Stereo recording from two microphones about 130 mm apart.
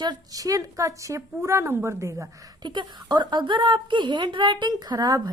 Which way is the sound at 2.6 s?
35° right (ahead or behind).